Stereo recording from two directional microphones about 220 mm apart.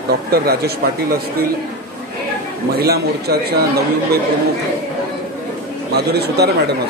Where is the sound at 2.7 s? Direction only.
45° right (ahead or behind).